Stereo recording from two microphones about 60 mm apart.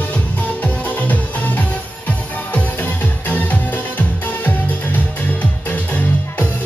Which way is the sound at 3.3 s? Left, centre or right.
Left.